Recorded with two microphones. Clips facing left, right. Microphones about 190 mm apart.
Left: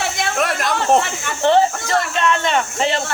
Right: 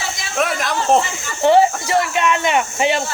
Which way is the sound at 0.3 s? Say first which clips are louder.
Right 2 dB; centre (ahead or behind).